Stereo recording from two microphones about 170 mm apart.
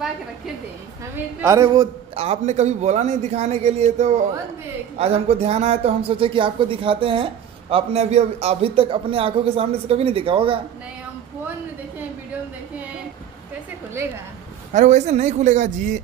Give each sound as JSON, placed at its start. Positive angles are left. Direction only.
{"t": 1.4, "sound": "a man's voice", "side_deg": -20}
{"t": 2.1, "sound": "speech", "side_deg": -40}
{"t": 14.7, "sound": "a man's voice", "side_deg": -45}